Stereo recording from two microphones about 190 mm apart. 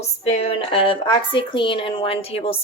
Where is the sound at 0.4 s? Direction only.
30° left (ahead or behind).